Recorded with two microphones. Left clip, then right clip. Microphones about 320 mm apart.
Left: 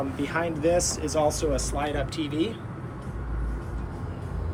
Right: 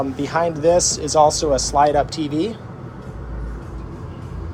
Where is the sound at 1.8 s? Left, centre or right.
Right.